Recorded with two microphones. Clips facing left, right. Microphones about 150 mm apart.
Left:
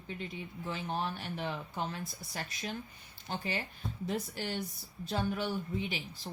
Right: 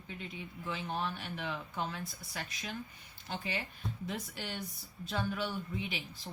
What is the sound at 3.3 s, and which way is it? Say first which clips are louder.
A woman's voice: left 2 dB; 40° left (ahead or behind).